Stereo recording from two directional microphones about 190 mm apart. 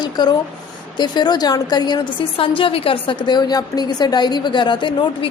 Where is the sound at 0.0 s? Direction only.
20° left (ahead or behind).